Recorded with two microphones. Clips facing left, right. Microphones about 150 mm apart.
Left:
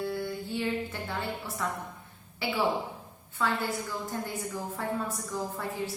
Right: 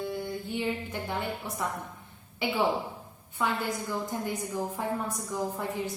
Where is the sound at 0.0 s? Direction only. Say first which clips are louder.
Left 1 dB; 20° right (ahead or behind).